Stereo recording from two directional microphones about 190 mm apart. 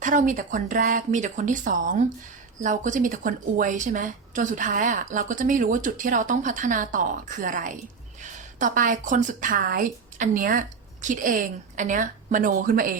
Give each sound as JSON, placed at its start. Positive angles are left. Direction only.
{"t": 0.0, "sound": "a woman's voice", "side_deg": -40}